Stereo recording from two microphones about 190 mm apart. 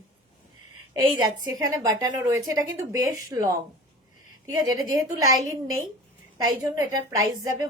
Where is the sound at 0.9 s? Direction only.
20° right (ahead or behind).